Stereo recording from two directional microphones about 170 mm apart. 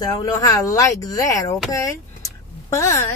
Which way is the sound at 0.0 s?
20° left (ahead or behind).